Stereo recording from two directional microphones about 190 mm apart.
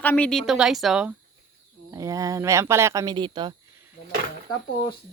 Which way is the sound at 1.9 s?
15° right (ahead or behind).